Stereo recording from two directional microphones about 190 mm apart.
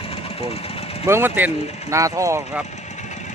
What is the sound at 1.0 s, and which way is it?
Speech, 10° right (ahead or behind).